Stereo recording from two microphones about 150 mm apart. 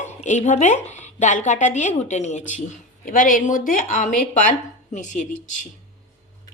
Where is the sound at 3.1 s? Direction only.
65° left (ahead or behind).